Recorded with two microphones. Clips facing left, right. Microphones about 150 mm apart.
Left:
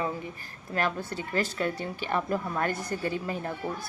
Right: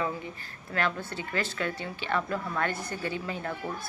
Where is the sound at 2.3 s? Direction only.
15° left (ahead or behind).